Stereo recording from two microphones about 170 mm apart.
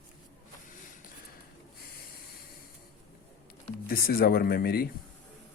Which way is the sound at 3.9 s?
60° left (ahead or behind).